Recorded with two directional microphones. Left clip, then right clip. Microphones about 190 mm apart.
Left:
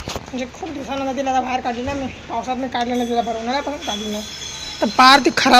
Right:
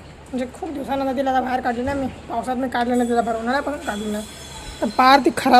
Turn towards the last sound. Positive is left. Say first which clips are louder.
# left 2 dB
turn(degrees=0)  # may be behind; listen again after turning